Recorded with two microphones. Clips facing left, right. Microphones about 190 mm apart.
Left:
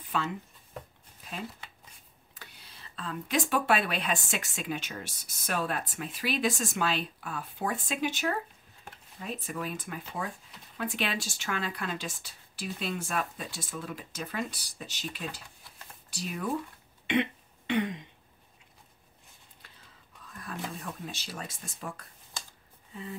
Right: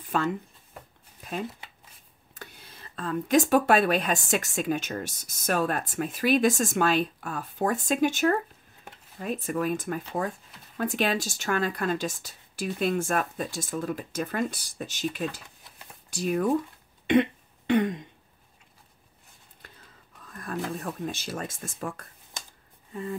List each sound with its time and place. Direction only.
0.1 s speech: 45° right (ahead or behind)
2.3 s speech: 45° right (ahead or behind)
17.1 s a sound: 45° right (ahead or behind)
20.2 s speech: 50° right (ahead or behind)